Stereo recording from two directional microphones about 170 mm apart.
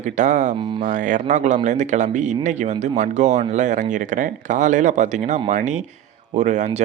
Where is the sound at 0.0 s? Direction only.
45° right (ahead or behind).